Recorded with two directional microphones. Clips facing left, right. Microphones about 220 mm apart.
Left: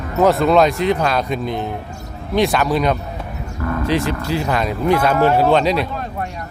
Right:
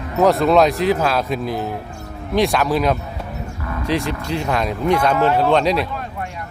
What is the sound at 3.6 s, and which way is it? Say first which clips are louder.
Vehicle: left 8 dB; 50° left (ahead or behind).